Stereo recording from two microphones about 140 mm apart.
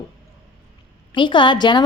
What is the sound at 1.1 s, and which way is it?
Speech, 35° left (ahead or behind).